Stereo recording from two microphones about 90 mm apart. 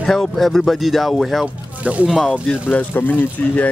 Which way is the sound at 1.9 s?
15° right (ahead or behind).